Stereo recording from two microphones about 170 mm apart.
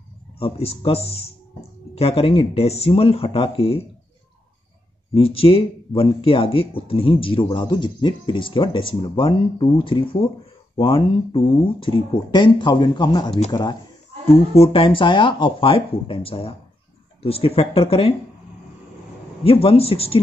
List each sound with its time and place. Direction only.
0.4 s speech: 35° left (ahead or behind)
5.1 s speech: 35° left (ahead or behind)
19.4 s speech: 35° left (ahead or behind)